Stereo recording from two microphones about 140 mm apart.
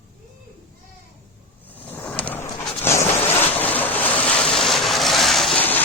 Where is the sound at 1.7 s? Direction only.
10° left (ahead or behind).